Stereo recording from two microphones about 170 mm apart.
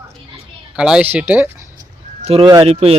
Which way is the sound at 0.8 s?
5° right (ahead or behind).